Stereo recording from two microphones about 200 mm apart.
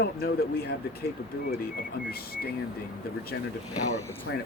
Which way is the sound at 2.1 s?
50° left (ahead or behind).